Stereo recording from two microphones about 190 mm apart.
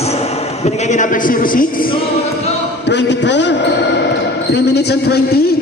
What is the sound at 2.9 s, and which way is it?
Basketball bounce, 65° left (ahead or behind).